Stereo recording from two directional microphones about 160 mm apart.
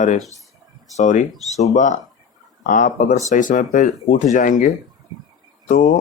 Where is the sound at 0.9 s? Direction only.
50° left (ahead or behind).